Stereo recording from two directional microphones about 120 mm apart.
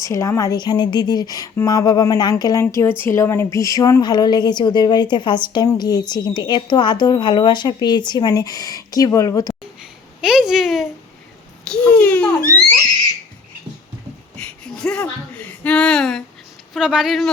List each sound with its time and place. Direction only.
0.0 s a woman's voice: 25° left (ahead or behind)
10.2 s a child's voice: 5° right (ahead or behind); by 12.3 s 10° left (ahead or behind)
14.3 s a sound: 5° left (ahead or behind)
16.7 s speech: 5° right (ahead or behind)